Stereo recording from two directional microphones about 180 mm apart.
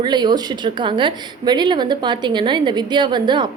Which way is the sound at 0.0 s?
25° right (ahead or behind).